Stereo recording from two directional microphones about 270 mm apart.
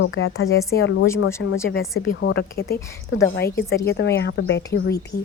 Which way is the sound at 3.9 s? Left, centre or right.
Left.